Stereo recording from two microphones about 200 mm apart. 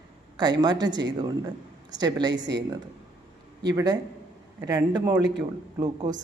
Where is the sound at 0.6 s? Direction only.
20° right (ahead or behind).